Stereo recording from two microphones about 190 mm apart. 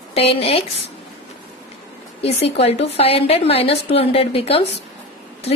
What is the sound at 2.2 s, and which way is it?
A woman's voice, 35° left (ahead or behind).